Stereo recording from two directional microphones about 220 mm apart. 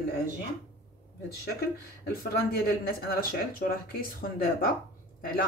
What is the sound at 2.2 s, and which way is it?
Speech, 45° left (ahead or behind).